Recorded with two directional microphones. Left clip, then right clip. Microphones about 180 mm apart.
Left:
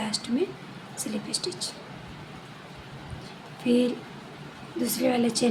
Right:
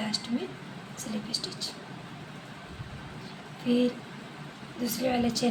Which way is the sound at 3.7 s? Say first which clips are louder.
Left 3 dB; 45° left (ahead or behind).